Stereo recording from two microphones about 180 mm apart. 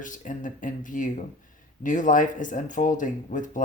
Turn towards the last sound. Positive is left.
turn(degrees=45)  # may be behind; listen again after turning